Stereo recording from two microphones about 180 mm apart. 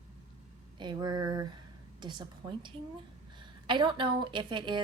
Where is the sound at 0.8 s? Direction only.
25° right (ahead or behind).